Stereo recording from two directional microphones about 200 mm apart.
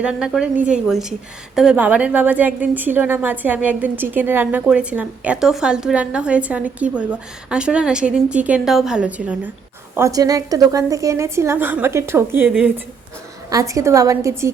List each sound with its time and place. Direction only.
0.0 s a woman's voice: 5° right (ahead or behind)
13.5 s a woman's voice: 15° right (ahead or behind)